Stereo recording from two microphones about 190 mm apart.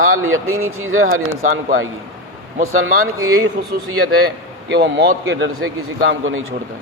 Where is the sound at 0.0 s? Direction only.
90° right.